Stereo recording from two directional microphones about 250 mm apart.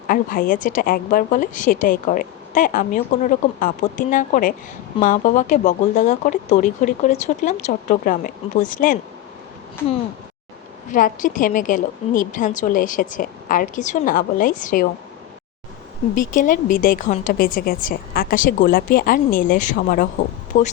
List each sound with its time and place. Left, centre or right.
0.1 s a woman's voice: left
10.9 s a woman's voice: left
16.3 s a woman's voice: left